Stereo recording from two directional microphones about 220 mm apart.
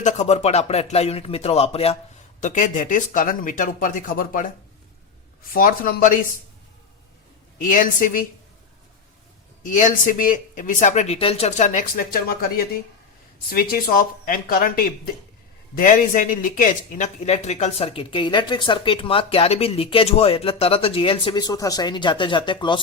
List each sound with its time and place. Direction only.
0.0 s speech: 30° left (ahead or behind)
5.5 s speech: 40° left (ahead or behind)
7.6 s speech: 35° left (ahead or behind)
9.6 s speech: 35° left (ahead or behind); by 22.8 s 20° left (ahead or behind)